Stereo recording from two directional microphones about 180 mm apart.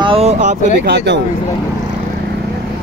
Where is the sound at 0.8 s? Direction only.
65° right (ahead or behind).